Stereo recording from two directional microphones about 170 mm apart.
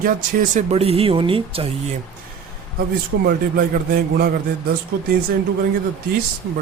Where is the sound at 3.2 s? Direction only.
65° right (ahead or behind).